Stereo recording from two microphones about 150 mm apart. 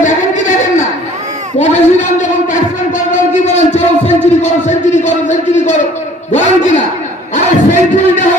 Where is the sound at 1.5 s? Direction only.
50° left (ahead or behind).